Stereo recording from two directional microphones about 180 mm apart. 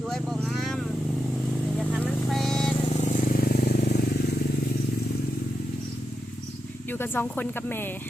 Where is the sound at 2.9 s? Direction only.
40° left (ahead or behind); by 4.4 s 65° left (ahead or behind).